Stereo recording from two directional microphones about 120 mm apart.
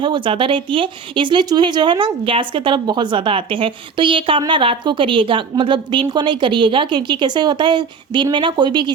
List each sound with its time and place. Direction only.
0.0 s speech: 45° right (ahead or behind)